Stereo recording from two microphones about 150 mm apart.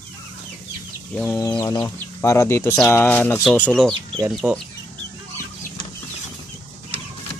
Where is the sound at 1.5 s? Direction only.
20° left (ahead or behind); by 4.6 s 5° right (ahead or behind).